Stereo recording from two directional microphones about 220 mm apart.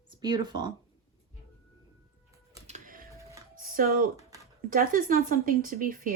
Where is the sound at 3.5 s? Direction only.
40° right (ahead or behind).